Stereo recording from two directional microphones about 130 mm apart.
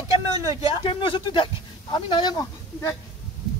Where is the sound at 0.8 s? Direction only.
40° left (ahead or behind).